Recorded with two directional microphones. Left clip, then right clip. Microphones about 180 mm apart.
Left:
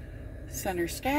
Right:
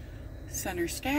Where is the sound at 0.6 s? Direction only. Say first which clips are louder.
Left 2 dB; 40° left (ahead or behind).